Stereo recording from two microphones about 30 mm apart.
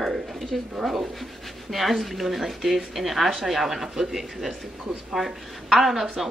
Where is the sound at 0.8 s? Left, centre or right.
Centre.